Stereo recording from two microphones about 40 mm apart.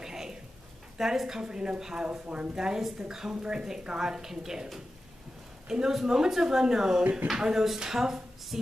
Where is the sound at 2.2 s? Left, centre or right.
Right.